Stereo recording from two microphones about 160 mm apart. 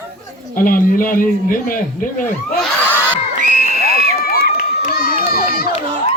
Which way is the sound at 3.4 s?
50° right (ahead or behind).